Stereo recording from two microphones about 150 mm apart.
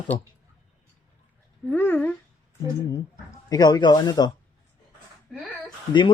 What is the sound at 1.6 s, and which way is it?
Speech, 15° left (ahead or behind).